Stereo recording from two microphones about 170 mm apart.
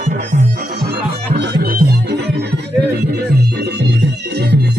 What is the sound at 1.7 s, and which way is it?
Music, 70° right (ahead or behind).